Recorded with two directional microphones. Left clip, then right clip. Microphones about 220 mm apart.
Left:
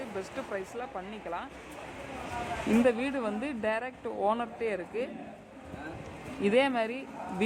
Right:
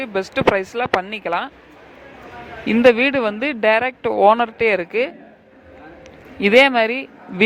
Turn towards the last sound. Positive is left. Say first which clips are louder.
# right 14 dB
turn(degrees=-35)  # may be behind; listen again after turning